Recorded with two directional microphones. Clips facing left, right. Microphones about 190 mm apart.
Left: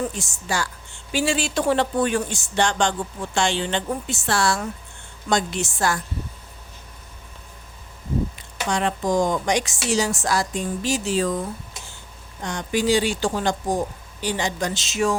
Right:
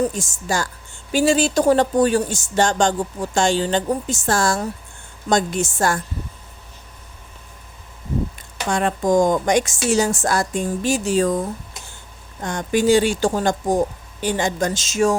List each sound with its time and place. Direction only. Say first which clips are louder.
0.0 s speech: right 6 dB; 45° right (ahead or behind)
8.4 s speech: right 2 dB; 45° right (ahead or behind)